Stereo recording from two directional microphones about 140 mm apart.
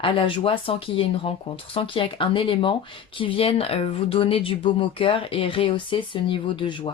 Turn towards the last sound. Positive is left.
turn(degrees=35)  # may be behind; listen again after turning